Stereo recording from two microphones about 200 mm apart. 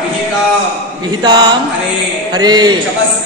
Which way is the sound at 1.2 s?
20° right (ahead or behind).